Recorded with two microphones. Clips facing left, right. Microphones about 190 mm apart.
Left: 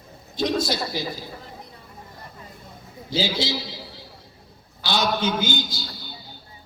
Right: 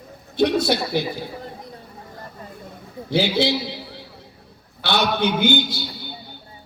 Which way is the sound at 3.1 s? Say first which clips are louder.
Right 6 dB; 60° right (ahead or behind).